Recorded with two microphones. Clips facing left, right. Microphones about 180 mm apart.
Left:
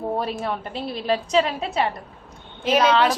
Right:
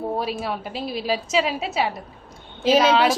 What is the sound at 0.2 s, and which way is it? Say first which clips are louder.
A woman's voice: even; 5° right (ahead or behind).